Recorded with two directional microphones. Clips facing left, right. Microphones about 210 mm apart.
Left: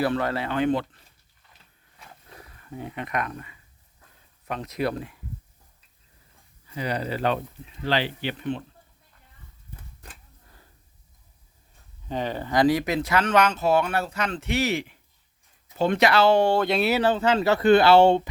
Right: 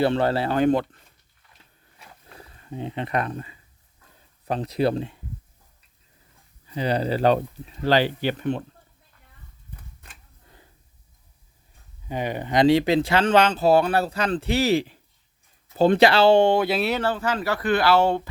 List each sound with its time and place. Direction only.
0.0 s speech: 30° right (ahead or behind)
2.4 s speech: 25° right (ahead or behind)
6.7 s speech: 30° right (ahead or behind)
12.0 s speech: 10° right (ahead or behind)
16.6 s speech: 5° right (ahead or behind)
17.0 s speech: 20° left (ahead or behind)